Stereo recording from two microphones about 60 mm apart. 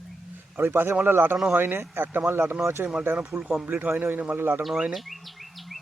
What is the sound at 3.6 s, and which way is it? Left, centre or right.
Speech, right.